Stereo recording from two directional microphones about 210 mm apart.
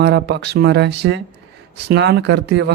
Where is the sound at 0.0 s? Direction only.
55° right (ahead or behind).